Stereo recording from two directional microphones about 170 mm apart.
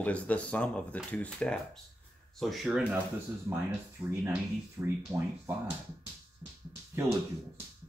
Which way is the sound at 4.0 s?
20° right (ahead or behind).